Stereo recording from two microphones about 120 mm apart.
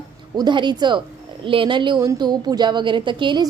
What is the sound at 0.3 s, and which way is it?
A woman's voice, 40° right (ahead or behind).